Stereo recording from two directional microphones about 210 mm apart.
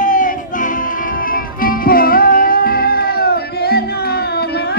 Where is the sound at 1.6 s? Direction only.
45° left (ahead or behind).